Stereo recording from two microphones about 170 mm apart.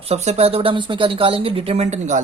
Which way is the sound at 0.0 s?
40° right (ahead or behind).